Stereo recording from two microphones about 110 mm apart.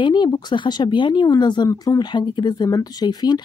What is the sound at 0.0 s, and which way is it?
Speech, 40° left (ahead or behind).